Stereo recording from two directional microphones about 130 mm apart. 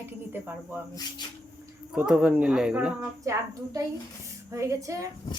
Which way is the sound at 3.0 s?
25° right (ahead or behind).